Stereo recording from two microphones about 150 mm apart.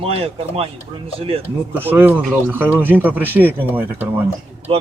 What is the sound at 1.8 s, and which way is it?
Speech, 15° right (ahead or behind).